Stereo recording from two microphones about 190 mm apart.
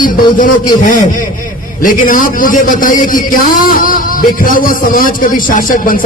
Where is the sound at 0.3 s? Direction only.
45° left (ahead or behind).